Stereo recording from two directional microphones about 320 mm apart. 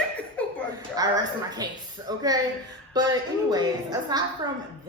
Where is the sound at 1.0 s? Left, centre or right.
Centre.